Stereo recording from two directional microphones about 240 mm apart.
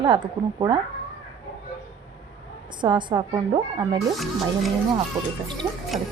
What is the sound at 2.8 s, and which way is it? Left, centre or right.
A woman's voice, centre.